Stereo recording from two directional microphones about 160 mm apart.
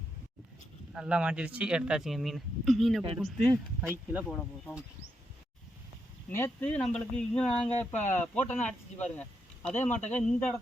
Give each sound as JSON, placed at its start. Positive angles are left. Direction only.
{"t": 0.9, "sound": "speech", "side_deg": -5}
{"t": 4.3, "sound": "speech", "side_deg": 5}
{"t": 6.3, "sound": "speech", "side_deg": 10}
{"t": 7.4, "sound": "a sound", "side_deg": 40}
{"t": 7.8, "sound": "speech", "side_deg": 10}